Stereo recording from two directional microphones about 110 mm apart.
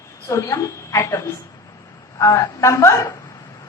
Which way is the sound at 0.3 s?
25° left (ahead or behind).